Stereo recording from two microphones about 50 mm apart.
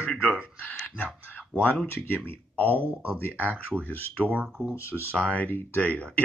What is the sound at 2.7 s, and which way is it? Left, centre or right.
Speech, right.